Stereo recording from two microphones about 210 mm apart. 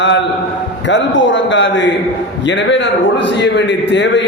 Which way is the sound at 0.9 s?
60° left (ahead or behind).